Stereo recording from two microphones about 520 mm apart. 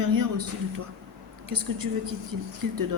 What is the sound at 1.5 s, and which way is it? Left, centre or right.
A man's voice, right.